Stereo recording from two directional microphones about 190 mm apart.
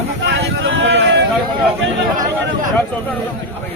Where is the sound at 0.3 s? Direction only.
75° right (ahead or behind).